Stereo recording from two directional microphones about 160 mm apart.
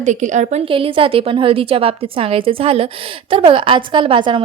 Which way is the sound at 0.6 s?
35° right (ahead or behind).